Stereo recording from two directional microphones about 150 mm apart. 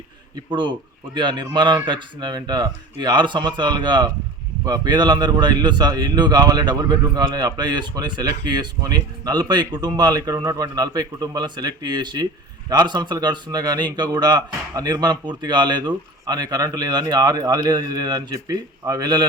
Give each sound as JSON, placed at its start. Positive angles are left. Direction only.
{"t": 0.5, "sound": "speech", "side_deg": -30}